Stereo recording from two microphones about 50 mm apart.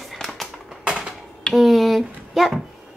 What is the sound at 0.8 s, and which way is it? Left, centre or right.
Typewriter, centre.